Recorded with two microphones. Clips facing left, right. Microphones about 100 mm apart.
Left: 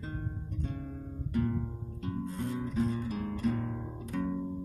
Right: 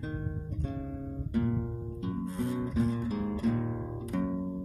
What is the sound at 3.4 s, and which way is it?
Music, 5° right (ahead or behind).